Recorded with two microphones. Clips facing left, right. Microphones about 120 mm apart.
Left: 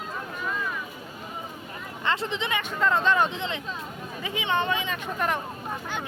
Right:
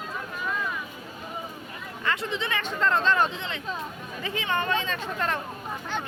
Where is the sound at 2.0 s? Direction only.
25° left (ahead or behind).